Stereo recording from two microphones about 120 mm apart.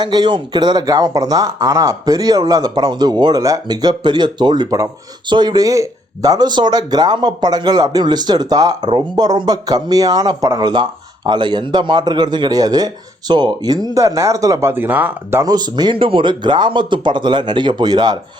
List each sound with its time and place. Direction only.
0.0 s speech: 35° right (ahead or behind); by 15.4 s 15° right (ahead or behind)
15.4 s speech: 35° right (ahead or behind)